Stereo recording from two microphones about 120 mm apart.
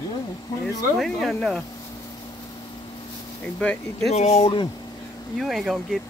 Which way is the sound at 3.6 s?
10° left (ahead or behind).